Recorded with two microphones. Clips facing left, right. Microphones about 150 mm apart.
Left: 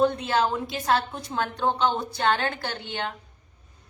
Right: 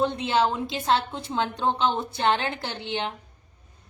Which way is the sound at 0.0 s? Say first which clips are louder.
Left 1 dB; 20° right (ahead or behind).